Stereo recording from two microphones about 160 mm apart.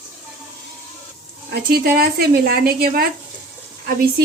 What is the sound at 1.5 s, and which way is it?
Speech, 75° right (ahead or behind).